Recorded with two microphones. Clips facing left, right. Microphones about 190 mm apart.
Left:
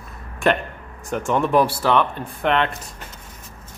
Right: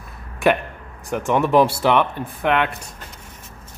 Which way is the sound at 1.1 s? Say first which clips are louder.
Right 2 dB; 15° right (ahead or behind).